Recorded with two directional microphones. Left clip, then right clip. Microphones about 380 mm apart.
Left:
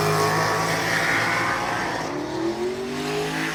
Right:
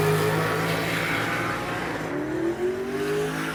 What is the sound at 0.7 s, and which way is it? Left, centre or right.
Music, left.